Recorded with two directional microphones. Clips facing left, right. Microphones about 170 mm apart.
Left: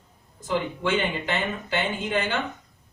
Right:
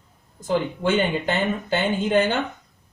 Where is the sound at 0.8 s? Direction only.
40° right (ahead or behind).